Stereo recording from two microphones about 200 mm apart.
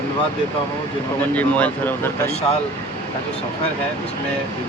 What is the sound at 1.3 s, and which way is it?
Speech, 5° left (ahead or behind).